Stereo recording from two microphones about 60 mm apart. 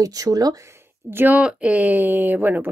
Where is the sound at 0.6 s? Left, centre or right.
Right.